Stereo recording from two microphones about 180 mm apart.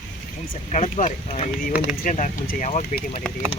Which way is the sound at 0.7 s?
40° left (ahead or behind).